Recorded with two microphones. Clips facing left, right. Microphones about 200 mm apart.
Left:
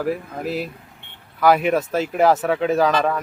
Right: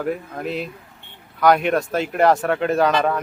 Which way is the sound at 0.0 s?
5° left (ahead or behind).